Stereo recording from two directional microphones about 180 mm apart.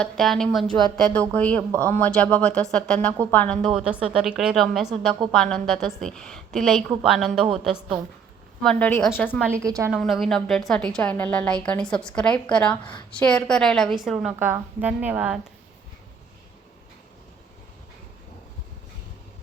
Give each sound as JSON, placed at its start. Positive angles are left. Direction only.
{"t": 0.0, "sound": "a woman's voice", "side_deg": 0}
{"t": 3.8, "sound": "a woman's voice", "side_deg": -5}
{"t": 9.5, "sound": "a woman's voice", "side_deg": -15}
{"t": 9.9, "sound": "a woman's voice", "side_deg": 0}